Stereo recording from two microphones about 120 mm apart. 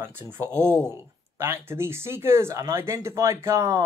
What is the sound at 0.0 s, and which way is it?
Speech, 20° right (ahead or behind).